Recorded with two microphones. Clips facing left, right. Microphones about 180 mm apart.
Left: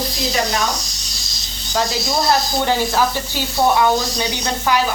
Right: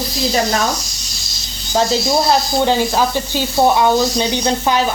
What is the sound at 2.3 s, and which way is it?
Speech, 20° right (ahead or behind).